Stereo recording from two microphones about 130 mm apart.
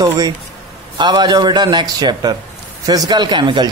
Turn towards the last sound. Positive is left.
turn(degrees=-35)  # may be behind; listen again after turning